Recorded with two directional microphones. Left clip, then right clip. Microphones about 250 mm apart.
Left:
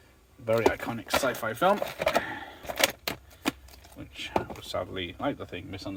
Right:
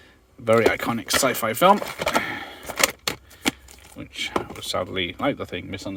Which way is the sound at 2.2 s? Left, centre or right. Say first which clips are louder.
Right 7 dB; right.